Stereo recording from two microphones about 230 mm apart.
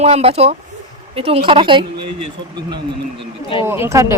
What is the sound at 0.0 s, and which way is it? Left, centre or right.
Speech, right.